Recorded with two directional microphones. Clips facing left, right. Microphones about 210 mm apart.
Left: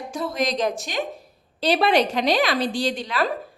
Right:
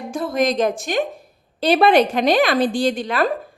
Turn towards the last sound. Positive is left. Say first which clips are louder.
# right 5 dB
turn(degrees=-50)  # may be behind; listen again after turning